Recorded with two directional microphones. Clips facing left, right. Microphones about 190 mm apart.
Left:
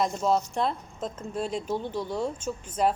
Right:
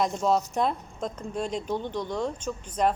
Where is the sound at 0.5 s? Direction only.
10° right (ahead or behind).